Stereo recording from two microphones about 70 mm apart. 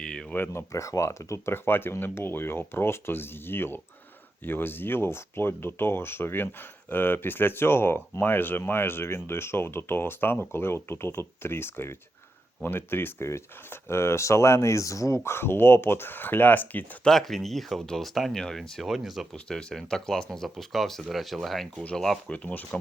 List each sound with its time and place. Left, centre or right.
0.0 s a sound: centre
0.5 s speech: left
1.5 s speech: left
17.0 s speech: centre
19.5 s speech: centre
22.3 s speech: left